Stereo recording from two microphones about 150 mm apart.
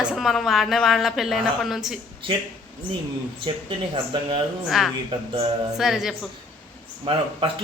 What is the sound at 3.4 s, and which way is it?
Speech, 35° right (ahead or behind).